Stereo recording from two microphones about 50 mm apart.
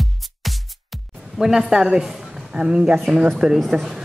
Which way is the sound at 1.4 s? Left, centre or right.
Centre.